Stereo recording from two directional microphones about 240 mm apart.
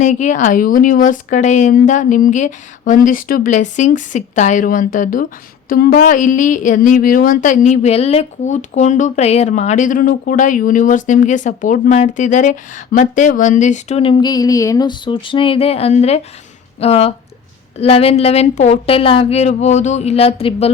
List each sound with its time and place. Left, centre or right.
0.0 s a woman's voice: left